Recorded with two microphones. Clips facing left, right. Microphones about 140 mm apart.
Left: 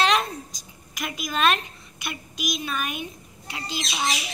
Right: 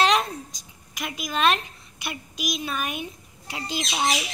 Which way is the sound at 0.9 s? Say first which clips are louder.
Even; 25° right (ahead or behind).